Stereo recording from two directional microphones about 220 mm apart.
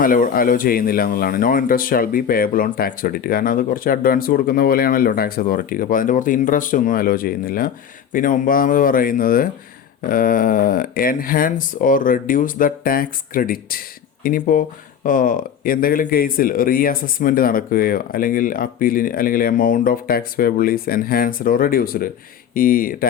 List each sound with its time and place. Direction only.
0.0 s speech: 40° left (ahead or behind)